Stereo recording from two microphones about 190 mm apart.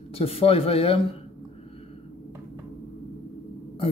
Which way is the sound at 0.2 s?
30° left (ahead or behind).